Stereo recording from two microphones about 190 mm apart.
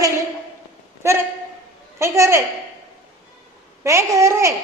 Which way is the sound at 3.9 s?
15° right (ahead or behind).